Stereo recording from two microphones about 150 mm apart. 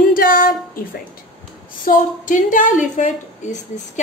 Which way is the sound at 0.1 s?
70° left (ahead or behind).